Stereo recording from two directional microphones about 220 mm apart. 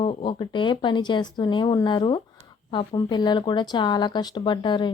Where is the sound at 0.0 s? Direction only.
25° left (ahead or behind).